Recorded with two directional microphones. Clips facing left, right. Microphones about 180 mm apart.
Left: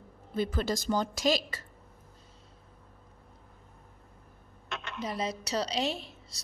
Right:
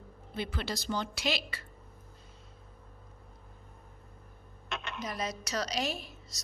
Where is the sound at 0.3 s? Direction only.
45° left (ahead or behind).